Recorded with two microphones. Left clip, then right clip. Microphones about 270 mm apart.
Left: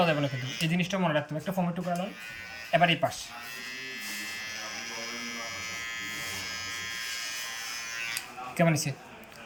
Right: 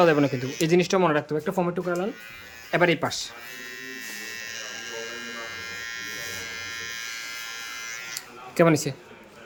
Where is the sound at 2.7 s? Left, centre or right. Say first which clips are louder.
Right 2 dB; centre.